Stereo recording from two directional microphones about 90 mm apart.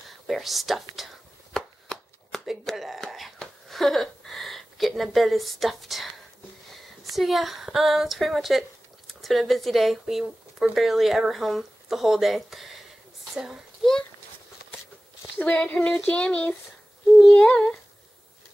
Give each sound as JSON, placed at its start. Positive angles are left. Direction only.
{"t": 0.3, "sound": "chopping", "side_deg": 0}
{"t": 2.6, "sound": "a woman's voice", "side_deg": 0}
{"t": 15.3, "sound": "speech", "side_deg": 15}